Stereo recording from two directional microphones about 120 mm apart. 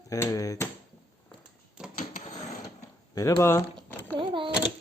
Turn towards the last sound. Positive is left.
turn(degrees=-45)  # may be behind; listen again after turning